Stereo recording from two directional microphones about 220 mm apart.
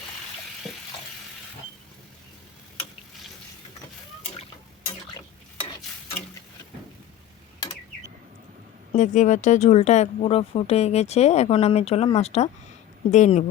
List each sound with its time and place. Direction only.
8.9 s speech: 35° left (ahead or behind)